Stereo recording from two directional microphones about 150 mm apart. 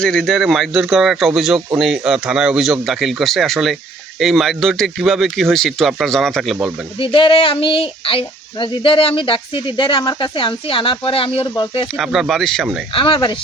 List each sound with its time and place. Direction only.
0.0 s speech: 5° left (ahead or behind)
7.0 s speech: 35° left (ahead or behind)
11.9 s speech: centre (ahead or behind)
12.9 s speech: 35° left (ahead or behind)